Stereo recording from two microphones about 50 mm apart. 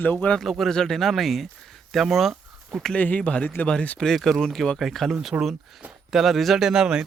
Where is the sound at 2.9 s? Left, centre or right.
Left.